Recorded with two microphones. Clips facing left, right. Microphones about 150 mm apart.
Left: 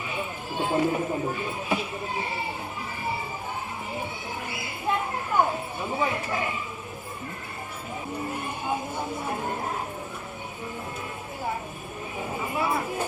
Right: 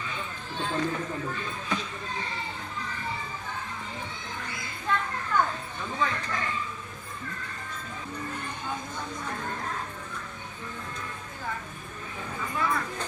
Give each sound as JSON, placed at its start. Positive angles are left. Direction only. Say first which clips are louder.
{"t": 0.1, "sound": "speech", "louder": "left 5 dB", "side_deg": 15}
{"t": 4.5, "sound": "a sound", "louder": "left 2 dB", "side_deg": 10}
{"t": 8.3, "sound": "speech", "louder": "left 6 dB", "side_deg": 10}
{"t": 12.6, "sound": "speech", "louder": "left 1 dB", "side_deg": 25}